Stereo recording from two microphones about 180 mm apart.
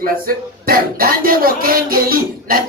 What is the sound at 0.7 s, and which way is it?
Speech, 55° right (ahead or behind).